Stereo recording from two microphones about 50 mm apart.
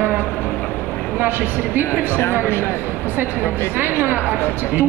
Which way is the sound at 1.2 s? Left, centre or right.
Right.